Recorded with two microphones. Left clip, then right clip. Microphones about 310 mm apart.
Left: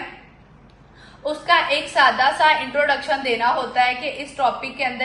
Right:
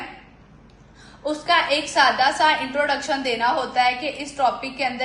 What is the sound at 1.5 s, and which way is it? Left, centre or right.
A woman's voice, centre.